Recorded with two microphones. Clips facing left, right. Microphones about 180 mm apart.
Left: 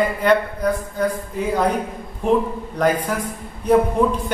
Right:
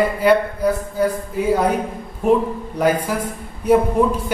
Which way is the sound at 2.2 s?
5° right (ahead or behind).